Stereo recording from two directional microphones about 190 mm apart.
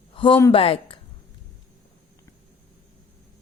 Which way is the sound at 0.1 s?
25° left (ahead or behind).